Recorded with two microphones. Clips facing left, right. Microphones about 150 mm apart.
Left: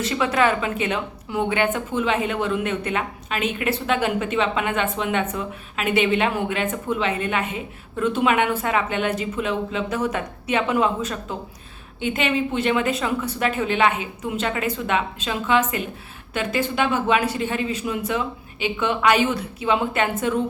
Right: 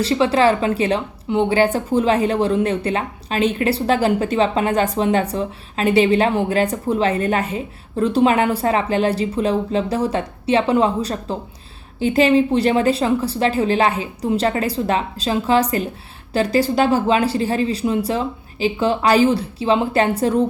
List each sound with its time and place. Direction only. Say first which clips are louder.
0.0 s a woman's voice: right 5 dB; 30° right (ahead or behind)